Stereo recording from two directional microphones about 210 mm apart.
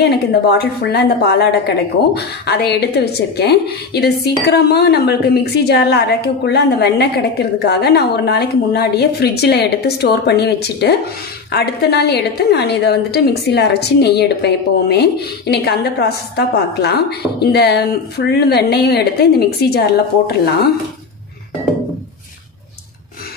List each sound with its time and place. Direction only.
0.0 s a woman's voice: 50° left (ahead or behind)